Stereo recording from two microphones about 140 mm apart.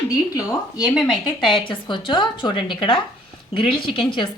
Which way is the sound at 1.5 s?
35° left (ahead or behind).